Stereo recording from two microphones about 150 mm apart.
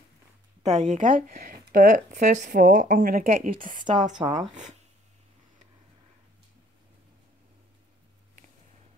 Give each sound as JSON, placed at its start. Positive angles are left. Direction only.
{"t": 0.6, "sound": "speech", "side_deg": -50}
{"t": 3.6, "sound": "speech", "side_deg": -55}